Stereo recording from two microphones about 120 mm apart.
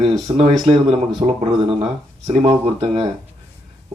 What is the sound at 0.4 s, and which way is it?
Speech, 40° right (ahead or behind).